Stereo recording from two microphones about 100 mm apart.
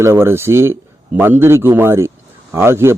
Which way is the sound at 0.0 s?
25° right (ahead or behind).